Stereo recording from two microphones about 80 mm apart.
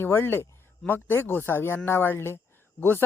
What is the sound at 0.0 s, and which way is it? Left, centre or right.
Speech, left.